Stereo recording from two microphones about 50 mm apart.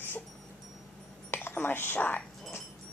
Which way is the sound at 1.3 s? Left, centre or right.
Left.